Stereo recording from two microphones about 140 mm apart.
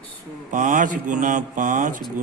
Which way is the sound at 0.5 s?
70° right (ahead or behind).